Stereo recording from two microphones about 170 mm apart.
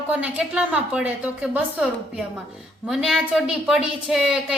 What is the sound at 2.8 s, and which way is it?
A woman's voice, centre (ahead or behind).